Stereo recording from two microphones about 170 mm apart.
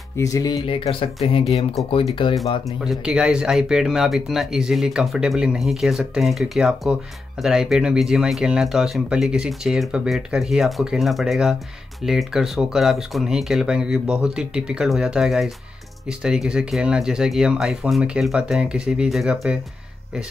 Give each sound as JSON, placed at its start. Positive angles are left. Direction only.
{"t": 0.2, "sound": "speech", "side_deg": 20}
{"t": 2.8, "sound": "speech", "side_deg": -5}